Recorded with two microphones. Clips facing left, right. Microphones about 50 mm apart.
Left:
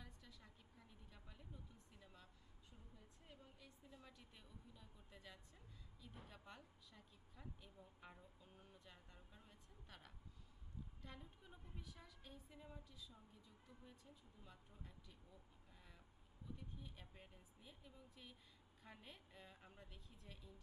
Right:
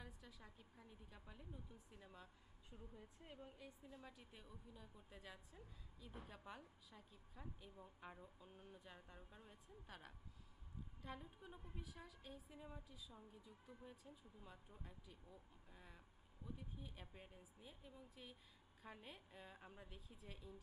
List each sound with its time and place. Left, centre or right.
0.0 s a woman's voice: centre
2.6 s a woman's voice: right
3.8 s a woman's voice: centre